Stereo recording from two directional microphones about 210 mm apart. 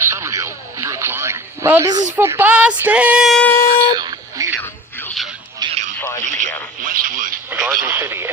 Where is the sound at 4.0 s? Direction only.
15° right (ahead or behind).